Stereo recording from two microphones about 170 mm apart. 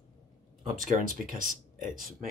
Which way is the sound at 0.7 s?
55° right (ahead or behind).